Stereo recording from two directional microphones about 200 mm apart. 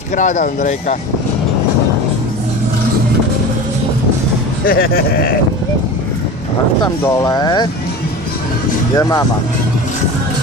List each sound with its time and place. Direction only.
0.2 s speech: 40° left (ahead or behind)
4.6 s speech: 45° left (ahead or behind)
6.8 s speech: 15° left (ahead or behind)
9.0 s speech: 15° left (ahead or behind)